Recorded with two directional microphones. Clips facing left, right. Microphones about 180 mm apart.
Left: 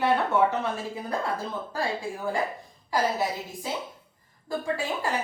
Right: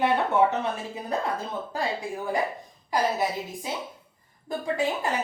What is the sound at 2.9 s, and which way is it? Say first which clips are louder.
A woman's voice: right 1 dB; 15° right (ahead or behind).